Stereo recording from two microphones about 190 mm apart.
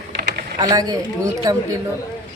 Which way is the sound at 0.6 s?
20° right (ahead or behind).